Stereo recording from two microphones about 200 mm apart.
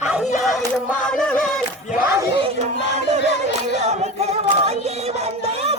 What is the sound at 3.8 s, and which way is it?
A capella, 35° right (ahead or behind).